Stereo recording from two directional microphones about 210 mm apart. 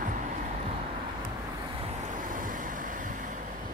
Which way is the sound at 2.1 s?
40° right (ahead or behind).